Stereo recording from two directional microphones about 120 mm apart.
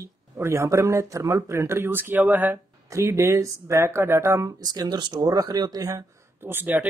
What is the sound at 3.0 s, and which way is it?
Speech, 25° right (ahead or behind).